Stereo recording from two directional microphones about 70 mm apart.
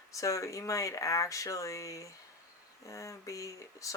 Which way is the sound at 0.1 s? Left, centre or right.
Left.